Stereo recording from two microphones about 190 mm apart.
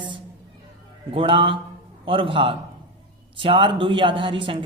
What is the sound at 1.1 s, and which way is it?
Speech, 30° right (ahead or behind).